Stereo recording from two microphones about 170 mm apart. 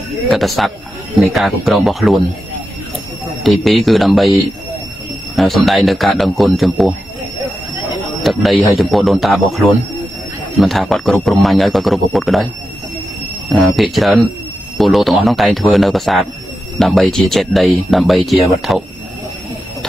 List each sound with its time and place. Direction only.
0.3 s speech: centre (ahead or behind)
3.4 s speech: centre (ahead or behind)
8.2 s speech: centre (ahead or behind)
13.5 s speech: centre (ahead or behind)